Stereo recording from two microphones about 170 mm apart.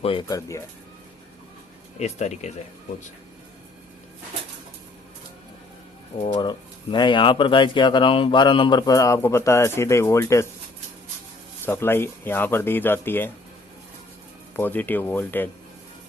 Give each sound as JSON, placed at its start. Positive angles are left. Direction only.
{"t": 0.0, "sound": "speech", "side_deg": 30}
{"t": 2.0, "sound": "speech", "side_deg": 40}
{"t": 6.1, "sound": "speech", "side_deg": 30}
{"t": 11.6, "sound": "speech", "side_deg": 15}
{"t": 14.5, "sound": "speech", "side_deg": 10}